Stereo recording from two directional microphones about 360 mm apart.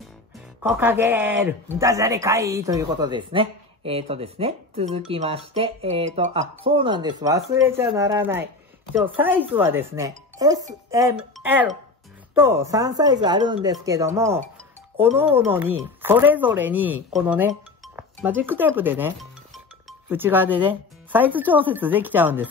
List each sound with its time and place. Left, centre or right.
0.6 s a woman's voice: centre